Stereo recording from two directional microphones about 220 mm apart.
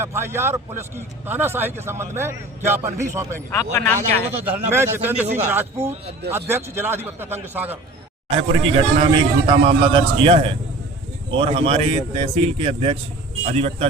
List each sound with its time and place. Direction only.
0.0 s a man's voice: 10° right (ahead or behind)
3.5 s speech: 15° left (ahead or behind)
4.7 s a man's voice: 10° right (ahead or behind)
8.3 s a man's voice: 25° right (ahead or behind)